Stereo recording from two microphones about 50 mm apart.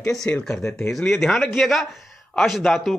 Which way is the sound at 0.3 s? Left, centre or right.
Centre.